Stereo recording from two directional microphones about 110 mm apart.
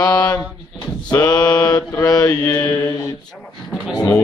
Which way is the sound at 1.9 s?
30° left (ahead or behind).